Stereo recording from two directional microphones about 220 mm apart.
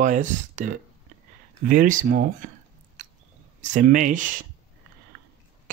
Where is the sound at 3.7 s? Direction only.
35° right (ahead or behind).